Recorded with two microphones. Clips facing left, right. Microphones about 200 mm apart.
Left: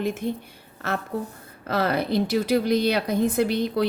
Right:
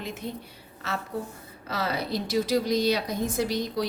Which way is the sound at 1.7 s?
55° left (ahead or behind).